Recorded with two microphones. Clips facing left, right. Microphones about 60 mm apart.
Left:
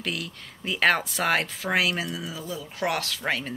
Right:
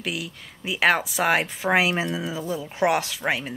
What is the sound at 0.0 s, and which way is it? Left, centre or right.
Speech, centre.